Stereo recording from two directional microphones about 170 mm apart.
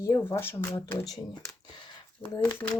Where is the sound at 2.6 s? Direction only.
15° left (ahead or behind).